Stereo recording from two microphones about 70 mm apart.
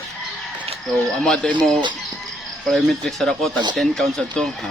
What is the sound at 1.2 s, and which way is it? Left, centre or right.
Speech, centre.